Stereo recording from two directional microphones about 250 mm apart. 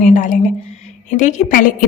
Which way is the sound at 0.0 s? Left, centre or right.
Left.